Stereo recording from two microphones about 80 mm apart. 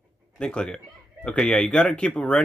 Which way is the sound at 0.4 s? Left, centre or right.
Centre.